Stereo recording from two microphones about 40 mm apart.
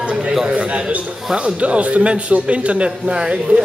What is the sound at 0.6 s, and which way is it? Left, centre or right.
A man's voice, right.